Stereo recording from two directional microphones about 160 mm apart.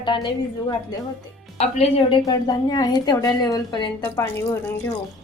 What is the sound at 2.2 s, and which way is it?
A woman's voice, 25° left (ahead or behind).